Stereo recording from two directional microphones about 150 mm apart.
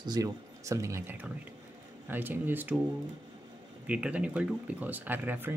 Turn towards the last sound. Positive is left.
turn(degrees=-15)  # may be behind; listen again after turning